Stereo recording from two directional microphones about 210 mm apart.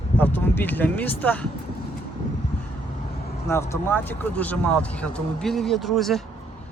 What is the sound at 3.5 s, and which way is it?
Speech, 10° left (ahead or behind).